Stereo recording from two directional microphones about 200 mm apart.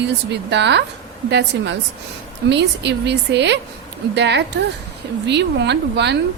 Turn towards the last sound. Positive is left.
turn(degrees=-60)  # may be behind; listen again after turning